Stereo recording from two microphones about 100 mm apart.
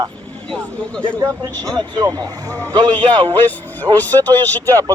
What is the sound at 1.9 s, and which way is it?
Speech, 40° right (ahead or behind).